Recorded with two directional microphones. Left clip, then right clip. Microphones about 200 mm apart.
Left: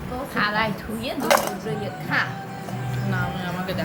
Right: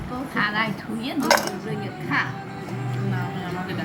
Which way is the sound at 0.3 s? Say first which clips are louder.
Left 1 dB; 25° left (ahead or behind).